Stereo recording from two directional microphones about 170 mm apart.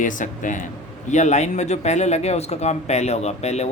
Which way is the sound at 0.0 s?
50° left (ahead or behind).